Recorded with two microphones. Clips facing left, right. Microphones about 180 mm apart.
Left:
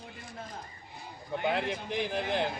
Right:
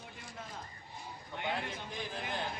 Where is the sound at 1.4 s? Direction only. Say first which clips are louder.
Left 7 dB; 80° left.